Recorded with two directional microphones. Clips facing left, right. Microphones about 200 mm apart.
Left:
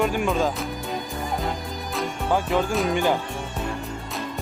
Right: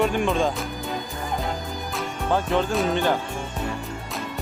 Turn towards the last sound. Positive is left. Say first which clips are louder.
# even
turn(degrees=10)  # may be behind; listen again after turning